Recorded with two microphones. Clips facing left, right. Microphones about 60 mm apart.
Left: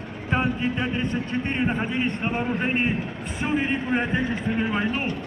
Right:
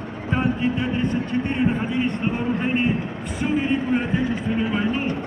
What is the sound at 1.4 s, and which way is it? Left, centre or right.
A man's voice, left.